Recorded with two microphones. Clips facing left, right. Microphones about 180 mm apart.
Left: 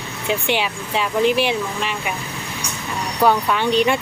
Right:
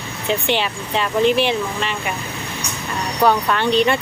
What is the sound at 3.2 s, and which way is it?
Speech, 10° left (ahead or behind).